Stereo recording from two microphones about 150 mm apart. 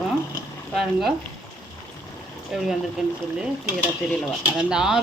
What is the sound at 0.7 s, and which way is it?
Speech, 5° right (ahead or behind).